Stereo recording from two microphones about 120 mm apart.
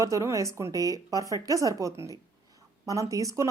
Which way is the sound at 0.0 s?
25° right (ahead or behind).